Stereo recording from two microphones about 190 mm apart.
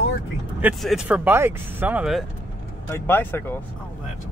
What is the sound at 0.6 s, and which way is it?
Speech, 5° right (ahead or behind).